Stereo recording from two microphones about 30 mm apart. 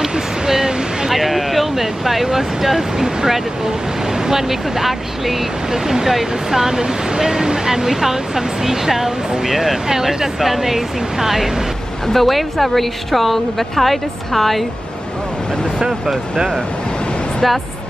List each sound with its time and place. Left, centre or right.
0.1 s a sound: right
1.1 s a woman's voice: centre
12.1 s a woman's voice: centre